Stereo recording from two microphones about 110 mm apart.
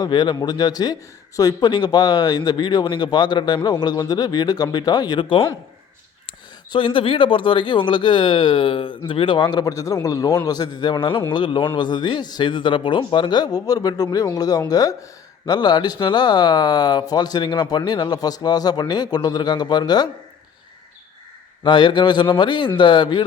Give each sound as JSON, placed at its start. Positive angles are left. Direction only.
{"t": 0.0, "sound": "speech", "side_deg": 40}
{"t": 6.7, "sound": "speech", "side_deg": 50}
{"t": 21.6, "sound": "speech", "side_deg": 50}